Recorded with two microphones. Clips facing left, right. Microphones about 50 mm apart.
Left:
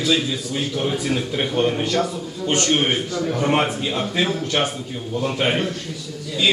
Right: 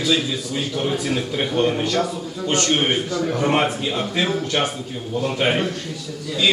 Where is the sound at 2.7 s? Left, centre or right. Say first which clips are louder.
Even; centre.